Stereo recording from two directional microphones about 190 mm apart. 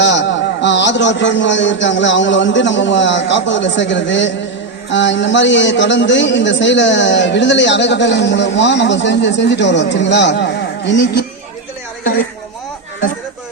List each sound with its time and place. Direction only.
0.0 s a man's voice: 70° left (ahead or behind)